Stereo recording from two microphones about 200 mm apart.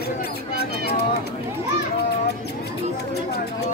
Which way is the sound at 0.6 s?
55° left (ahead or behind).